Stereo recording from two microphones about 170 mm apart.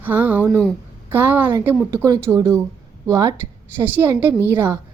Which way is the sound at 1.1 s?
10° right (ahead or behind).